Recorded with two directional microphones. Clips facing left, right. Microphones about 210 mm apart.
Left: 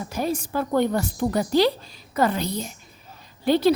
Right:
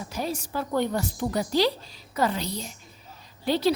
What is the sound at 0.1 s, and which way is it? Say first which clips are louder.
A woman's voice: left 5 dB; 50° left (ahead or behind).